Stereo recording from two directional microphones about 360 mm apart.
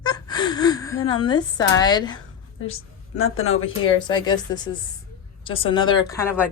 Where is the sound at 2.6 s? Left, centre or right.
Left.